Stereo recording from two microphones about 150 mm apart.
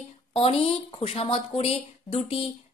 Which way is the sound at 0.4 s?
40° left (ahead or behind).